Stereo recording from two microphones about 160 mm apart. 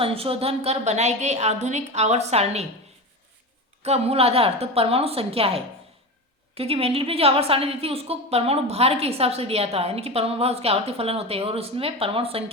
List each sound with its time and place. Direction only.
0.0 s a woman's voice: 35° right (ahead or behind)
3.8 s a woman's voice: 40° right (ahead or behind)